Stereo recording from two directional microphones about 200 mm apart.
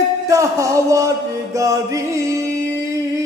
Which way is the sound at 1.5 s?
15° right (ahead or behind).